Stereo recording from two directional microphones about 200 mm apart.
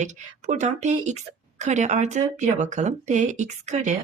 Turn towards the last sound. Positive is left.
turn(degrees=-35)  # may be behind; listen again after turning